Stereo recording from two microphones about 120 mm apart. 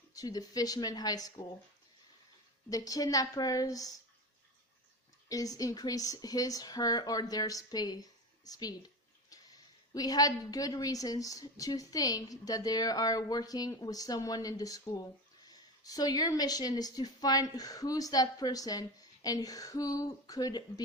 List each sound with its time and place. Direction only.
0.1 s a woman's voice: 30° left (ahead or behind)
2.6 s a woman's voice: 30° left (ahead or behind)
5.3 s a woman's voice: 30° left (ahead or behind)
9.3 s a sound: 30° left (ahead or behind)
9.9 s a woman's voice: 30° left (ahead or behind)